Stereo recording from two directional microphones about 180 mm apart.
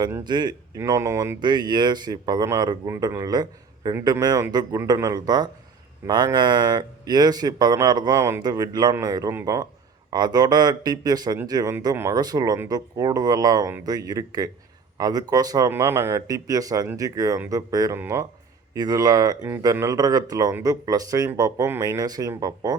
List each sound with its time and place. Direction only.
0.3 s speech: 25° right (ahead or behind)